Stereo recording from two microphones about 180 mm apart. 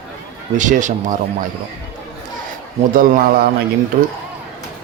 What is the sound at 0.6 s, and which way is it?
Speech, 45° right (ahead or behind).